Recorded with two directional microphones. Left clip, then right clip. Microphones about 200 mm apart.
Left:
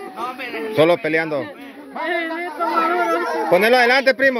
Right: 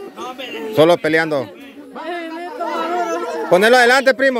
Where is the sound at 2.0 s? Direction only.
20° left (ahead or behind).